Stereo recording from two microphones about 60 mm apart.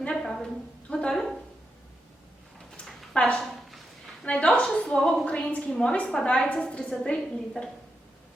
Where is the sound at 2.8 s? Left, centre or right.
Centre.